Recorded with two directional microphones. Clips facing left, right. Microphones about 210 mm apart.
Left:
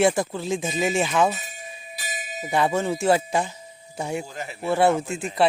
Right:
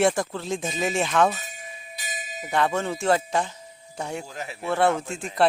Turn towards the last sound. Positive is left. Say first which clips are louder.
# left 3 dB
turn(degrees=5)  # may be behind; listen again after turning